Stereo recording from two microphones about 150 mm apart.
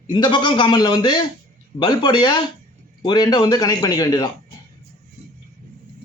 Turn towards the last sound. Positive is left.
turn(degrees=30)  # may be behind; listen again after turning